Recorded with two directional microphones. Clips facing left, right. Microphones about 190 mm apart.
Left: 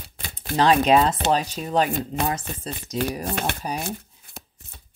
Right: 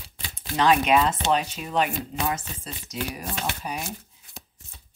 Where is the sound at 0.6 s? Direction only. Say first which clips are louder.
Left 3 dB; 35° left (ahead or behind).